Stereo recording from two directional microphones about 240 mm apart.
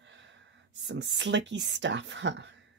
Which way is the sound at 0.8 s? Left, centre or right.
Right.